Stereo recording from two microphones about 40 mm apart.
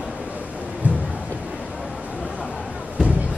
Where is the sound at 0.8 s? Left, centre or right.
Right.